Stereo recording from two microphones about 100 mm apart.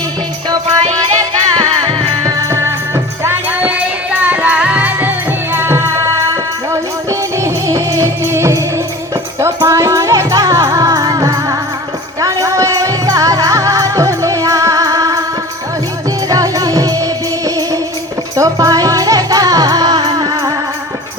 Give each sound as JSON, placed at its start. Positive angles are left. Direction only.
{"t": 0.9, "sound": "music", "side_deg": -40}
{"t": 16.3, "sound": "music", "side_deg": -35}